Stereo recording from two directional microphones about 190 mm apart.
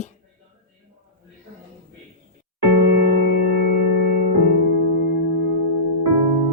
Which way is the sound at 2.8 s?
60° right (ahead or behind).